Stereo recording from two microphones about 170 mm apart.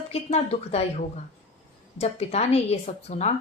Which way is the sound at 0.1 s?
40° left (ahead or behind).